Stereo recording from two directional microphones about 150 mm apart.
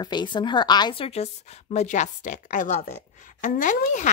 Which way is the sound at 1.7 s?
50° left (ahead or behind).